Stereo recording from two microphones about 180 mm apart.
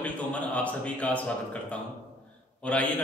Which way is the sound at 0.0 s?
10° left (ahead or behind).